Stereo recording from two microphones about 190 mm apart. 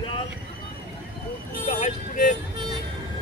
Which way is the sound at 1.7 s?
35° left (ahead or behind).